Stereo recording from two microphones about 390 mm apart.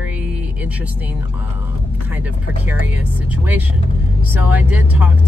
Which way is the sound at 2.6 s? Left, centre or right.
Centre.